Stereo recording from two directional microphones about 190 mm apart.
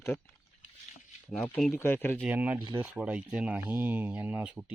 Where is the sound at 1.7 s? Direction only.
10° left (ahead or behind).